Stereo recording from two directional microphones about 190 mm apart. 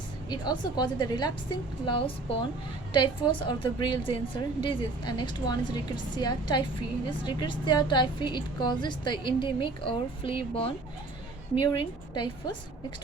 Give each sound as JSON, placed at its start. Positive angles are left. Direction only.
{"t": 0.3, "sound": "a woman's voice", "side_deg": 20}